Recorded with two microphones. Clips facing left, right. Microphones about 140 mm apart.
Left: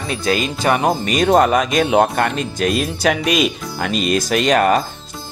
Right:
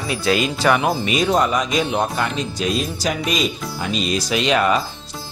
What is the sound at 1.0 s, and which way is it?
Speech, 50° left (ahead or behind).